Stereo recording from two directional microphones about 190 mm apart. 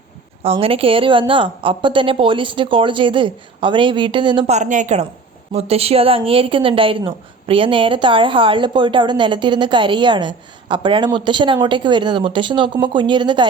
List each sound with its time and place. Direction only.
0.4 s a woman's voice: 30° right (ahead or behind)
4.5 s a woman's voice: 40° right (ahead or behind); by 13.5 s 25° right (ahead or behind)